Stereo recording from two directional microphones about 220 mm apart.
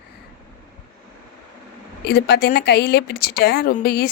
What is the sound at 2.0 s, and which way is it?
A woman's voice, 45° left (ahead or behind).